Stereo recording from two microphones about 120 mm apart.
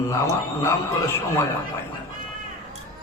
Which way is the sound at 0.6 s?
20° left (ahead or behind).